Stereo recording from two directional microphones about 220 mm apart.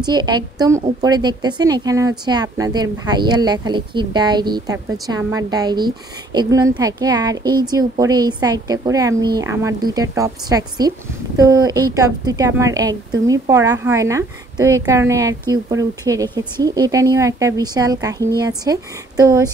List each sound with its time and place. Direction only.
0.0 s a woman's voice: 20° right (ahead or behind)